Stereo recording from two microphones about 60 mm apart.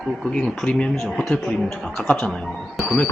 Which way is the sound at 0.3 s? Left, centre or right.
Centre.